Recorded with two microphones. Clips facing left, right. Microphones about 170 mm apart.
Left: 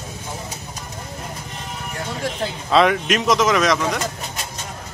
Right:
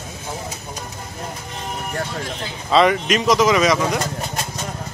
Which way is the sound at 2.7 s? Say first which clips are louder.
Right 1 dB; centre (ahead or behind).